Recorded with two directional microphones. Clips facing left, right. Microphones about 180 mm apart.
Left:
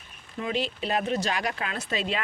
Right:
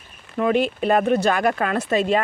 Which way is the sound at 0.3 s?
55° right (ahead or behind).